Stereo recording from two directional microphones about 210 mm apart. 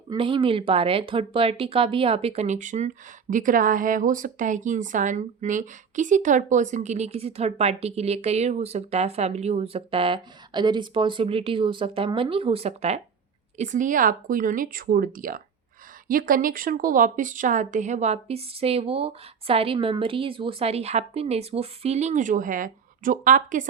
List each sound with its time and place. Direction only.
0.1 s speech: 25° right (ahead or behind)